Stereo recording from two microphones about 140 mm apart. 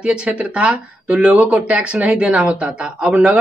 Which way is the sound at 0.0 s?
10° right (ahead or behind).